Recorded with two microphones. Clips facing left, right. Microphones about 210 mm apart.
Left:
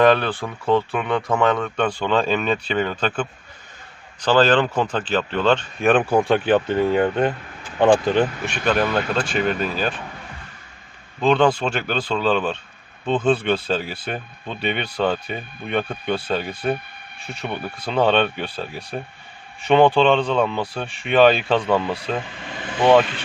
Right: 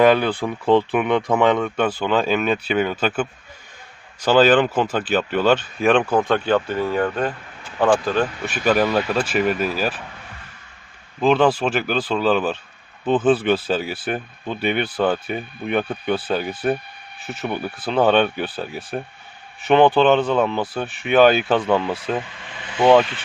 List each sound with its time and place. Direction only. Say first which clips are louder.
0.0 s speech: right 1 dB; 10° right (ahead or behind); by 8.3 s 20° left (ahead or behind)
8.4 s speech: right 2 dB; 5° right (ahead or behind)
11.2 s speech: right 1 dB; 5° right (ahead or behind)